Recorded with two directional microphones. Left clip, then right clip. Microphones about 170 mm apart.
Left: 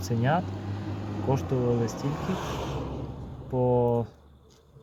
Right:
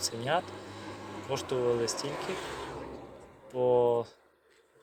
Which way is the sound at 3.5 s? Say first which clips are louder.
Left 1 dB; 45° right (ahead or behind).